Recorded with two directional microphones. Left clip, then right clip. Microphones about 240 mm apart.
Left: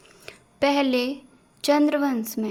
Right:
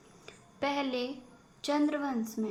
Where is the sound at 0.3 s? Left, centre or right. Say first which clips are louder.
Left 11 dB; left.